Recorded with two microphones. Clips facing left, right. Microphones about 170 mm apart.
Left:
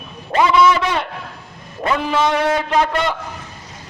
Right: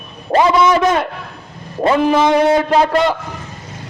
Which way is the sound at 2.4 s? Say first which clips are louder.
Right 5 dB; 30° right (ahead or behind).